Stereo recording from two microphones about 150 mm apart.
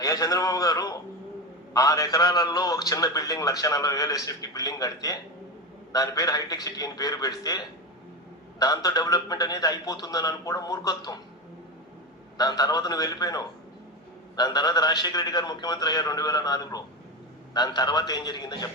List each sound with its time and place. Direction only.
0.0 s a man's voice: 25° left (ahead or behind)
12.4 s a man's voice: 25° left (ahead or behind)